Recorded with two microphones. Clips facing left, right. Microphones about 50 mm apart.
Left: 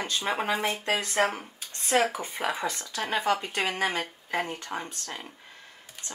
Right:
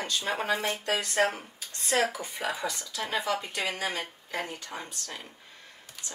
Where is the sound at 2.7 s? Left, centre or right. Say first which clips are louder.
Left 2 dB; left.